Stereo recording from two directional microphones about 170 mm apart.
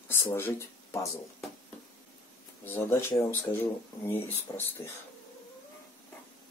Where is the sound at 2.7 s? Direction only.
15° left (ahead or behind).